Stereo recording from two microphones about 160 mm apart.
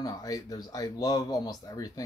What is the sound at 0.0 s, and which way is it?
Speech, 25° left (ahead or behind).